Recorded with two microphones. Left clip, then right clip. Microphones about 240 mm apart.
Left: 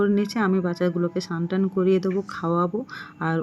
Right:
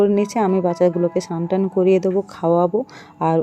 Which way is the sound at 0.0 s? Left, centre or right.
Centre.